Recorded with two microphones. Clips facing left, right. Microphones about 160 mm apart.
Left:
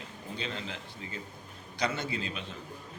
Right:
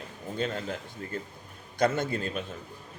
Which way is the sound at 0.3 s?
45° right (ahead or behind).